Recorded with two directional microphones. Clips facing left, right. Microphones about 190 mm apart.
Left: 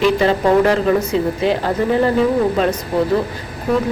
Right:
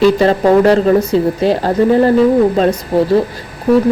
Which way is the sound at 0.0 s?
35° right (ahead or behind).